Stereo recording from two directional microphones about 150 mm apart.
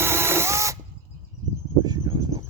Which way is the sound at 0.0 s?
15° right (ahead or behind).